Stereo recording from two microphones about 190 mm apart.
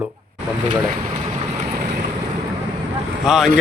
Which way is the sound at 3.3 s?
Centre (ahead or behind).